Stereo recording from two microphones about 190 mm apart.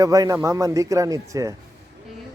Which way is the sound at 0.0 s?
15° right (ahead or behind).